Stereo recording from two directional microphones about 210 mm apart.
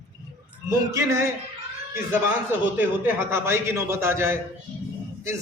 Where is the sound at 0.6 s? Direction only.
15° right (ahead or behind).